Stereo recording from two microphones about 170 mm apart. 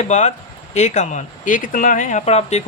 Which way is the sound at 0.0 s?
45° left (ahead or behind).